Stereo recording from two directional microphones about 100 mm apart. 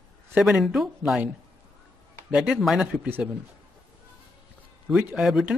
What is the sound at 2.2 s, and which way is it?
Speech, 5° right (ahead or behind).